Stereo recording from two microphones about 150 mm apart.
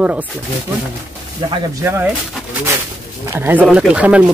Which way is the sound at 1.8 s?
15° right (ahead or behind).